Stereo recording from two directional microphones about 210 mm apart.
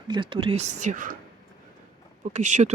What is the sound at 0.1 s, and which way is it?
Speech, 25° right (ahead or behind).